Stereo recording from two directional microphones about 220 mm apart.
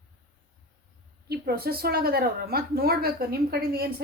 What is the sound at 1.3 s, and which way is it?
A woman's voice, 45° right (ahead or behind).